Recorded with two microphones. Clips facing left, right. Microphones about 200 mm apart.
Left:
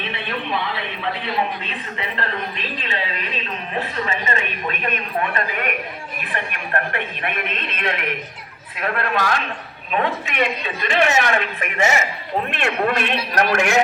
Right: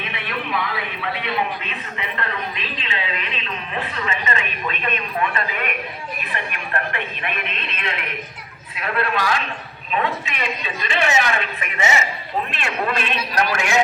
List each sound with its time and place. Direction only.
0.0 s a sound: 30° left (ahead or behind)
2.7 s a woman's voice: 45° left (ahead or behind)
6.9 s a woman's voice: 50° left (ahead or behind)